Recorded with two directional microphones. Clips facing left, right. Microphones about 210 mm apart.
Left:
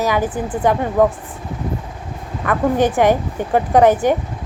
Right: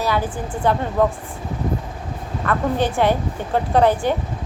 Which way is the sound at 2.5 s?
15° left (ahead or behind).